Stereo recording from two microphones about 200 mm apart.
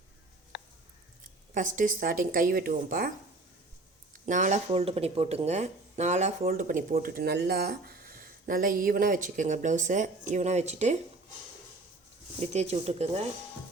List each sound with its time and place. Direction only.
1.5 s a woman's voice: 40° right (ahead or behind)
4.3 s speech: 40° right (ahead or behind)
12.4 s speech: 35° right (ahead or behind)